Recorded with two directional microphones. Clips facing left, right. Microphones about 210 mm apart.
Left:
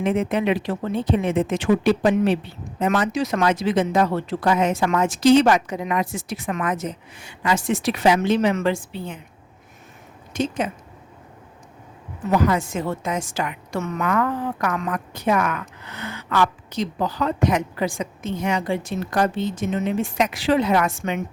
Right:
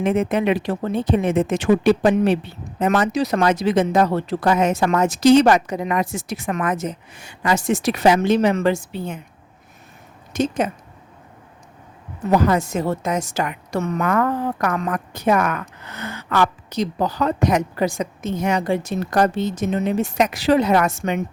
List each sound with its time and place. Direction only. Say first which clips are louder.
0.0 s speech: right 2 dB; 45° right (ahead or behind)
10.3 s speech: right 3 dB; 45° right (ahead or behind)
12.3 s speech: right 2 dB; 40° right (ahead or behind)